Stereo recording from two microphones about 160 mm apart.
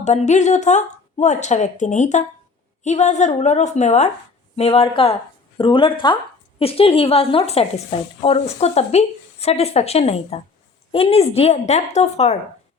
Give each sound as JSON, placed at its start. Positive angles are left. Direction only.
{"t": 0.0, "sound": "a woman's voice", "side_deg": 45}